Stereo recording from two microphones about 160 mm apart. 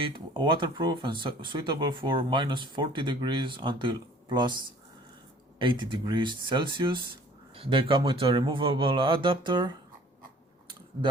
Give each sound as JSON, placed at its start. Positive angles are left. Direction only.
{"t": 0.0, "sound": "speech", "side_deg": -30}
{"t": 5.5, "sound": "speech", "side_deg": -30}